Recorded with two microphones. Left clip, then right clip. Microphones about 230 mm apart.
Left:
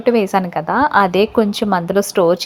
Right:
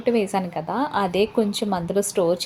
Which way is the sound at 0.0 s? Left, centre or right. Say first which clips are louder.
Left 7 dB; centre.